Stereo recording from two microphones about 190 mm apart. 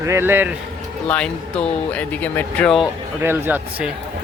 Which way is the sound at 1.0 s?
5° left (ahead or behind).